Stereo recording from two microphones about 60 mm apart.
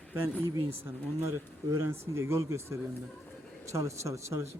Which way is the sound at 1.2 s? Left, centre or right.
Right.